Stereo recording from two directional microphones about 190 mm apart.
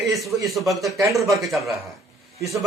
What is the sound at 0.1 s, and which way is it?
A man's voice, centre (ahead or behind).